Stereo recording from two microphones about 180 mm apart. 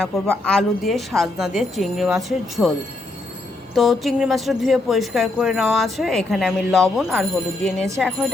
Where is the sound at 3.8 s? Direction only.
Centre (ahead or behind).